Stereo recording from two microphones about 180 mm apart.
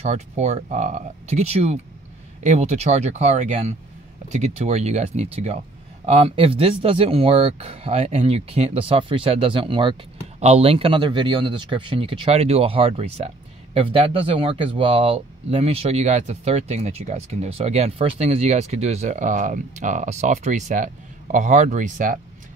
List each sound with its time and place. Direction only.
0.0 s speech: 40° right (ahead or behind)